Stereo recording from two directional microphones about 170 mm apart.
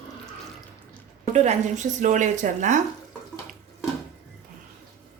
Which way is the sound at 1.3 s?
45° right (ahead or behind).